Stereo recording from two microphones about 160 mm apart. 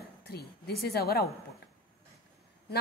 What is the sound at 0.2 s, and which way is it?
A woman's voice, 80° left.